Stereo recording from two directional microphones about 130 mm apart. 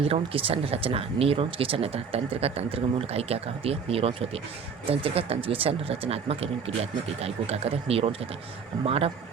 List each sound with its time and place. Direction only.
0.0 s speech: 45° right (ahead or behind)